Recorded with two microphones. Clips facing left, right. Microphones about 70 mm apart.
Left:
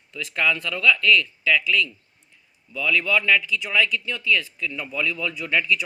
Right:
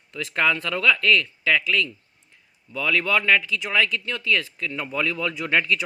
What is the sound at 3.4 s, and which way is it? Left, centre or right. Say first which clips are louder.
Speech: left 1 dB; right.